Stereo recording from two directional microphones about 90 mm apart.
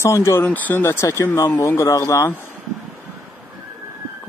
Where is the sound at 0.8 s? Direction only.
30° left (ahead or behind).